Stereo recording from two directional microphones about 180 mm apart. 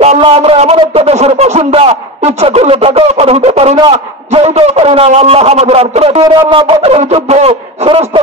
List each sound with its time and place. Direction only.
0.0 s a man's voice: 35° right (ahead or behind)